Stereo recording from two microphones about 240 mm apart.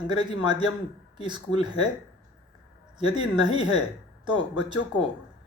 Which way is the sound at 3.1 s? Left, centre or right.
Centre.